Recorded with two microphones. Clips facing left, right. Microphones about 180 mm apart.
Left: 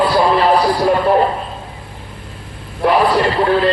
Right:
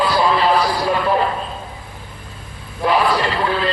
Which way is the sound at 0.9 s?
45° left (ahead or behind).